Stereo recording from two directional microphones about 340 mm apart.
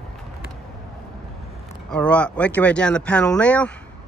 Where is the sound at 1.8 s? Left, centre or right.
Centre.